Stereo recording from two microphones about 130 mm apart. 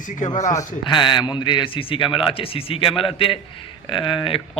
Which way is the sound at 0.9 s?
35° left (ahead or behind).